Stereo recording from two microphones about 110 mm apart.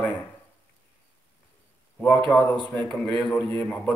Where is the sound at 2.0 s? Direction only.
10° left (ahead or behind).